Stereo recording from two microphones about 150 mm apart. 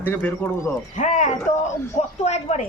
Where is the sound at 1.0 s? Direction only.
55° left (ahead or behind).